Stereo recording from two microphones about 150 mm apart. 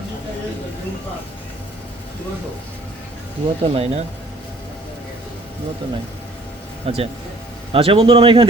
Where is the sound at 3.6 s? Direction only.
45° right (ahead or behind).